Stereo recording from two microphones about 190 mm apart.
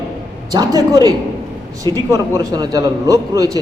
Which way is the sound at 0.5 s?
20° right (ahead or behind).